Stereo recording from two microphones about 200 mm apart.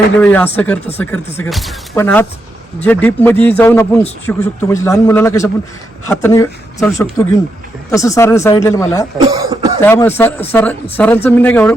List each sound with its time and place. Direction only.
0.2 s speech: 10° left (ahead or behind)
9.1 s cough: 25° right (ahead or behind)
9.8 s speech: 10° left (ahead or behind)